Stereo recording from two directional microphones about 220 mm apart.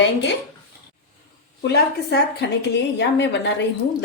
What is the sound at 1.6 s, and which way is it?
A woman's voice, 50° left (ahead or behind).